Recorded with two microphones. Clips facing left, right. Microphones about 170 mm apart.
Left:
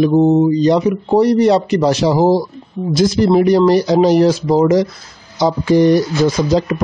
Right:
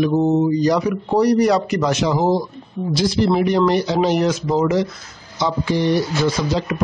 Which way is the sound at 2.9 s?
45° left (ahead or behind).